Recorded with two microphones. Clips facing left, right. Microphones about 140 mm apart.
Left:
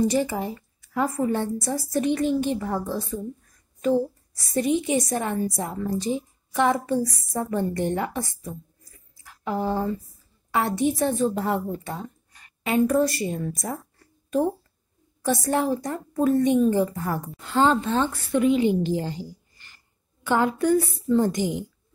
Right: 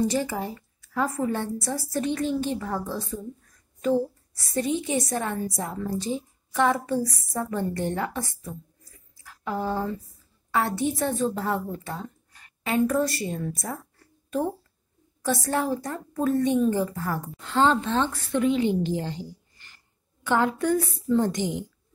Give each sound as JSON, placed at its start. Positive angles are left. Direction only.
{"t": 0.1, "sound": "a woman's voice", "side_deg": 15}
{"t": 4.5, "sound": "a woman's voice", "side_deg": 15}
{"t": 9.2, "sound": "a sound", "side_deg": 15}
{"t": 10.5, "sound": "a woman's voice", "side_deg": 15}
{"t": 15.2, "sound": "a woman's voice", "side_deg": 15}
{"t": 17.4, "sound": "a woman's voice", "side_deg": 10}
{"t": 20.2, "sound": "a woman's voice", "side_deg": 5}